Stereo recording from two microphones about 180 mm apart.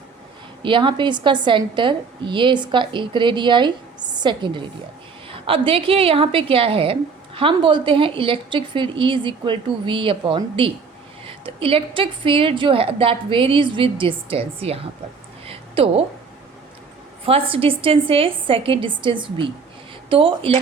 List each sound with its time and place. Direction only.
0.6 s a woman's voice: 25° right (ahead or behind)
15.4 s a sound: 30° right (ahead or behind)
17.2 s a woman's voice: 30° right (ahead or behind)